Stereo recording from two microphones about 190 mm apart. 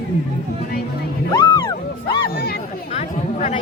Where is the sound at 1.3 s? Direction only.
20° left (ahead or behind).